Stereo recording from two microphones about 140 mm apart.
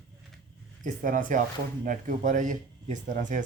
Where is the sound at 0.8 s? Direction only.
70° right (ahead or behind).